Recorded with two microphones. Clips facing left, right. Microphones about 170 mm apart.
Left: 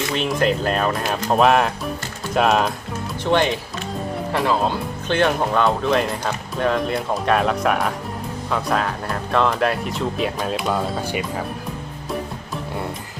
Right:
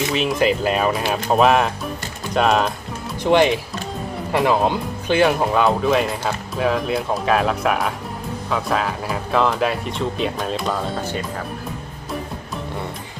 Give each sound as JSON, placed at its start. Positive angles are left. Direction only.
{"t": 0.1, "sound": "speech", "side_deg": 0}
{"t": 3.3, "sound": "speech", "side_deg": -10}
{"t": 5.0, "sound": "speech", "side_deg": -5}